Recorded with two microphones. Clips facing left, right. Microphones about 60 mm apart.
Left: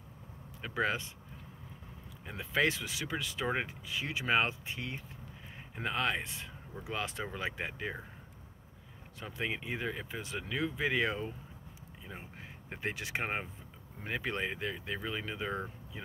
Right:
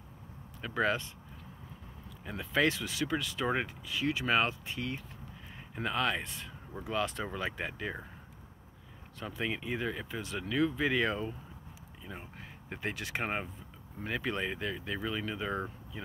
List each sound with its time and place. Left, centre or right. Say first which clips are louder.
0.6 s speech: right 2 dB; centre
2.2 s speech: right 2 dB; left
9.4 s speech: right 2 dB; left